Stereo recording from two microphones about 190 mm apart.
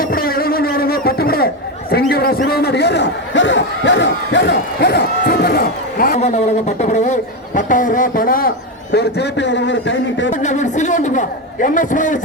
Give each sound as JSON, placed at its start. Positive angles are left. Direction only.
{"t": 0.0, "sound": "a sound", "side_deg": 50}
{"t": 1.9, "sound": "a man's voice", "side_deg": 55}
{"t": 6.1, "sound": "speech", "side_deg": 35}
{"t": 10.4, "sound": "a man's voice", "side_deg": 40}